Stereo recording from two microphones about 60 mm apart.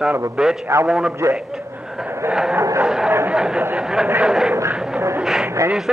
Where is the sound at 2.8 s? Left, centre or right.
Centre.